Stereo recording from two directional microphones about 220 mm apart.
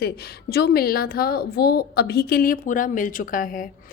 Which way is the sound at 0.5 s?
45° left (ahead or behind).